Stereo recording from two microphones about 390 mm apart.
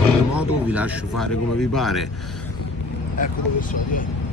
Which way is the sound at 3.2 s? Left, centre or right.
Left.